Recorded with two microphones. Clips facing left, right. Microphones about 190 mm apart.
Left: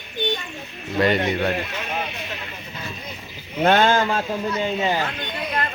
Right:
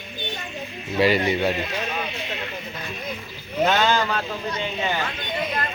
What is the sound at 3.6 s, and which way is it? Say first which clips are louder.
Speech: left 3 dB; 50° left (ahead or behind).